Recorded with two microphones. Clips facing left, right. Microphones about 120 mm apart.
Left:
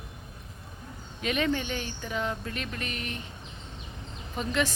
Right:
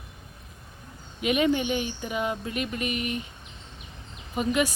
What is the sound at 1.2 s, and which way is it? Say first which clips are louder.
Speech: right 5 dB; 15° right (ahead or behind).